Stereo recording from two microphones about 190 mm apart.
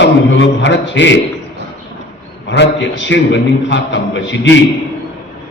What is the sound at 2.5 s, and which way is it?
A man's voice, 70° left (ahead or behind).